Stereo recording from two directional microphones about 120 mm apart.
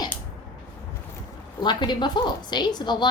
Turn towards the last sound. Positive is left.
turn(degrees=40)  # may be behind; listen again after turning